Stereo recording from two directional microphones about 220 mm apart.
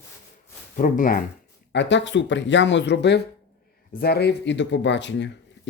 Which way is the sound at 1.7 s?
55° left (ahead or behind).